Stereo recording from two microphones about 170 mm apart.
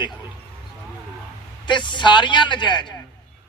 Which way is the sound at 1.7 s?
25° left (ahead or behind).